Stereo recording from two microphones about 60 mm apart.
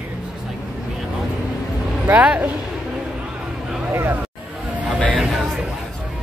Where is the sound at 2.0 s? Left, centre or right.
Right.